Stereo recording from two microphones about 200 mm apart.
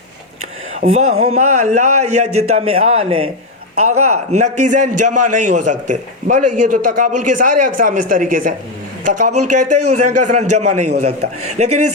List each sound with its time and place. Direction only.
0.8 s a man's voice: 35° right (ahead or behind)